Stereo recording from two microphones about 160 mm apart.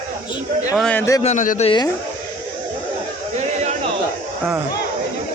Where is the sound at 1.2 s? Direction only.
50° left (ahead or behind).